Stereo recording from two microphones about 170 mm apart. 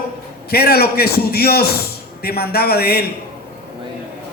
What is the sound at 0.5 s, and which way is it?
A man's voice, 65° left (ahead or behind).